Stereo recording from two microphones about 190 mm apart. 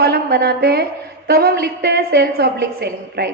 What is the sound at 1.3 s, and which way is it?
A woman's voice, 55° right (ahead or behind).